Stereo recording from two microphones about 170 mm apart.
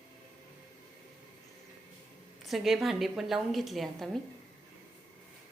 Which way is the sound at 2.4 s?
Centre (ahead or behind).